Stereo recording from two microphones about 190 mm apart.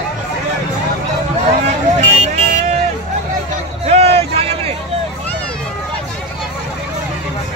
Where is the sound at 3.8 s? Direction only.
30° right (ahead or behind).